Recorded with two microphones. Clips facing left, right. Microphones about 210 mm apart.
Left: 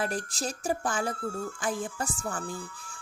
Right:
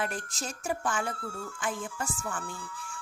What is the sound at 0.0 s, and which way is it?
A woman's voice, 35° left (ahead or behind).